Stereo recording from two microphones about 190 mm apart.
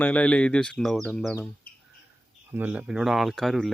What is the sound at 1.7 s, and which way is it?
Bird, 55° left (ahead or behind).